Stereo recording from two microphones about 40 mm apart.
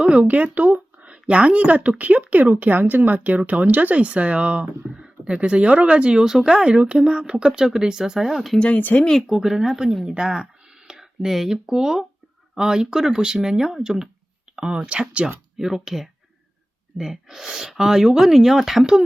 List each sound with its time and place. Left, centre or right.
0.0 s speech: right
0.6 s a sound: right
1.3 s speech: right
6.2 s speech: centre
6.5 s speech: right
8.3 s speech: centre
8.7 s speech: left
9.2 s speech: centre
14.5 s a sound: right
14.9 s speech: right
15.5 s speech: centre